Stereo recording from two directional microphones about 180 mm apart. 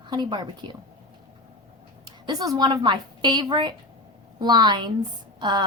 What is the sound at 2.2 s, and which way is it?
A woman's voice, 20° right (ahead or behind).